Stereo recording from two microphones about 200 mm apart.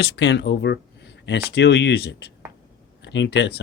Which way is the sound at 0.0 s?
60° left (ahead or behind).